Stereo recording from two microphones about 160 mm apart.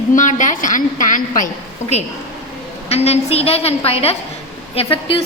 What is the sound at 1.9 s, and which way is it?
A woman's voice, 45° left (ahead or behind).